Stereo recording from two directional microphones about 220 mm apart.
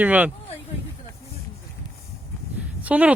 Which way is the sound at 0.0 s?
5° right (ahead or behind).